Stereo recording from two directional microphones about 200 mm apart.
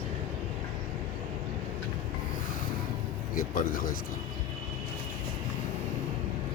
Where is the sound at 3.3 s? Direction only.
45° left (ahead or behind).